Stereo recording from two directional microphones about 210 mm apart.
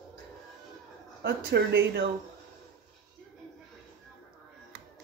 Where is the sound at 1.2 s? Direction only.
55° right (ahead or behind).